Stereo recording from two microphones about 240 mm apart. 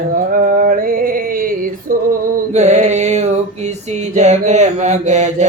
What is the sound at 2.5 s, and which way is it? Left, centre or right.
Music, right.